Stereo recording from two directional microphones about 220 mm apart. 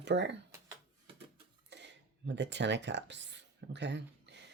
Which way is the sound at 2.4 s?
55° right (ahead or behind).